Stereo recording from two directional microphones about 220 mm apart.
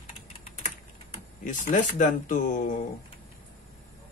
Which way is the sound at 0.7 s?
35° left (ahead or behind).